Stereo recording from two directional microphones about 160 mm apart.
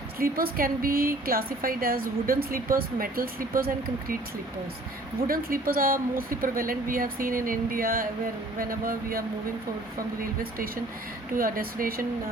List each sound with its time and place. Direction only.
0.2 s a woman's voice: 65° right (ahead or behind)
5.3 s a woman's voice: 65° right (ahead or behind)
11.3 s a woman's voice: 60° right (ahead or behind)